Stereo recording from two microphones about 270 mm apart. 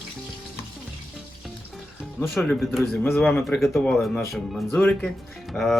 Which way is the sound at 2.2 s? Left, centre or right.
Centre.